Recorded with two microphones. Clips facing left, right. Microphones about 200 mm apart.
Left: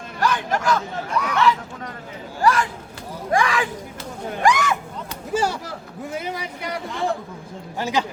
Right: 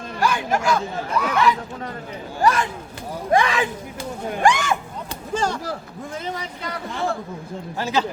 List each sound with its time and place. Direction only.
0.2 s speech: 10° right (ahead or behind)
2.4 s chatter: 20° right (ahead or behind)
3.3 s speech: 20° right (ahead or behind)
4.4 s a sound: 30° right (ahead or behind)
5.3 s a sound: 10° left (ahead or behind)
6.1 s a man's voice: 10° left (ahead or behind)